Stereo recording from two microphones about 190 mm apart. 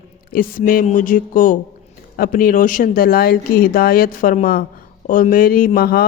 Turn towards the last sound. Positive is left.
turn(degrees=50)  # may be behind; listen again after turning